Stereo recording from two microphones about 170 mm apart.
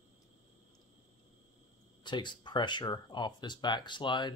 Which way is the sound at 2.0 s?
25° left (ahead or behind).